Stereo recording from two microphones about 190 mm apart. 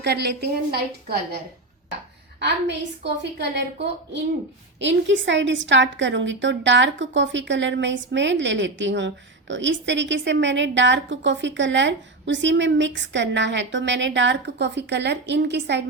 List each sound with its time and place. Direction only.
0.0 s a woman's voice: 60° right (ahead or behind)
2.4 s a woman's voice: 65° right (ahead or behind)